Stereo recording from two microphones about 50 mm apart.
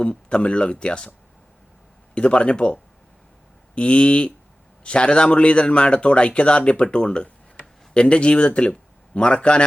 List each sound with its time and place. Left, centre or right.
0.0 s a man's voice: left
2.1 s a man's voice: left
3.8 s a man's voice: left